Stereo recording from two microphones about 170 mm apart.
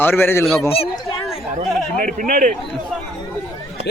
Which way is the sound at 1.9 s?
50° right (ahead or behind).